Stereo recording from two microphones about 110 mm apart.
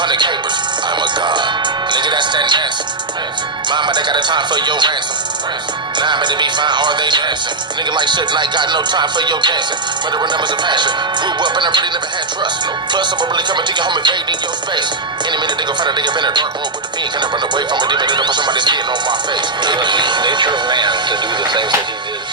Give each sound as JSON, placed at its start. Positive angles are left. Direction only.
{"t": 0.0, "sound": "speech", "side_deg": -45}
{"t": 3.7, "sound": "speech", "side_deg": -45}
{"t": 6.0, "sound": "speech", "side_deg": -45}
{"t": 12.9, "sound": "speech", "side_deg": -45}